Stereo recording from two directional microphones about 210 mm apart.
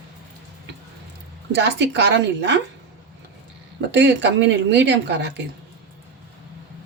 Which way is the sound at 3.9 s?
55° right (ahead or behind).